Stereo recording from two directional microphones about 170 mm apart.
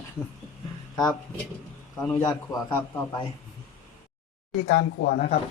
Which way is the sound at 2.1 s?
20° left (ahead or behind).